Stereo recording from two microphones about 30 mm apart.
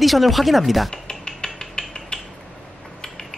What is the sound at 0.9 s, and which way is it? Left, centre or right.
Finger snapping, left.